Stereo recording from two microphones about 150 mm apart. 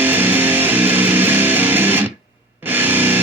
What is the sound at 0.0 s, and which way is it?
Music, 10° right (ahead or behind).